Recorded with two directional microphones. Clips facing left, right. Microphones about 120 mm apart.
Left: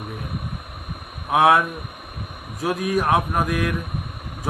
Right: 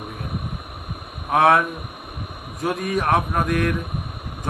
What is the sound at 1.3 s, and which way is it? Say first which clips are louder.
A man's voice: even; centre (ahead or behind).